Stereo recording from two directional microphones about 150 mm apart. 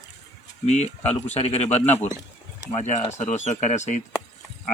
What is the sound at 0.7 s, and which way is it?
Speech, 50° left (ahead or behind).